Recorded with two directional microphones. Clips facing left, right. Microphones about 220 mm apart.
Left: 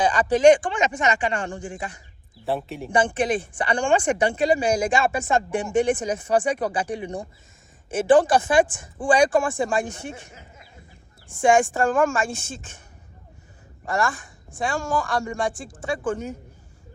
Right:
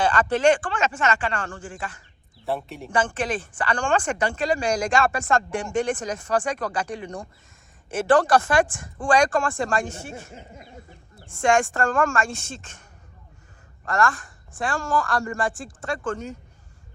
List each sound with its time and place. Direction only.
0.0 s speech: 15° left (ahead or behind)
2.5 s a woman's voice: centre (ahead or behind)
2.9 s a woman's voice: 10° left (ahead or behind)
8.6 s a woman's voice: centre (ahead or behind)
9.8 s speech: 15° left (ahead or behind)
11.3 s a woman's voice: centre (ahead or behind)
13.8 s speech: 10° left (ahead or behind)
14.1 s a woman's voice: centre (ahead or behind)